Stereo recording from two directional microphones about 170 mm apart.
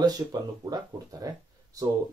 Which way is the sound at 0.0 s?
25° right (ahead or behind).